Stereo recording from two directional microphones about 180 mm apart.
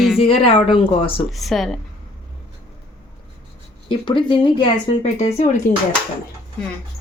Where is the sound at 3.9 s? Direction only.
25° left (ahead or behind).